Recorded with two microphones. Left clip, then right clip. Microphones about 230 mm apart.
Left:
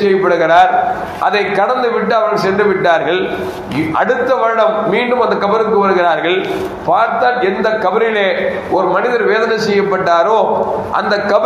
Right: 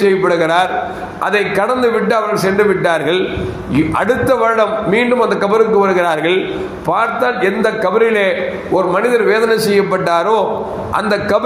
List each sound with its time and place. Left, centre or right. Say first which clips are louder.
0.0 s a man's voice: left 1 dB; right